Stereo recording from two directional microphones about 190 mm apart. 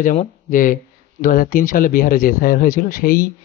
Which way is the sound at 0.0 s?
45° left (ahead or behind).